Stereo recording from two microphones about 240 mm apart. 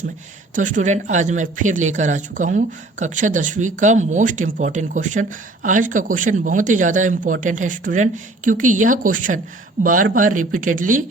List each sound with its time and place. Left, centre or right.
0.5 s speech: right